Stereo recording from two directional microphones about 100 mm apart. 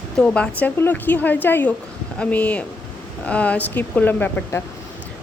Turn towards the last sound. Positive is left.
turn(degrees=15)  # may be behind; listen again after turning